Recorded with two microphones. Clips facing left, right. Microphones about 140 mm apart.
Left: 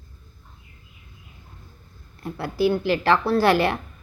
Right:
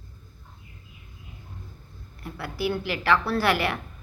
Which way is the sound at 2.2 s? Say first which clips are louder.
Left 7 dB; 25° left (ahead or behind).